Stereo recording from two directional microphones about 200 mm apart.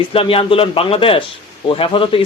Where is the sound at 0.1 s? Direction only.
30° left (ahead or behind).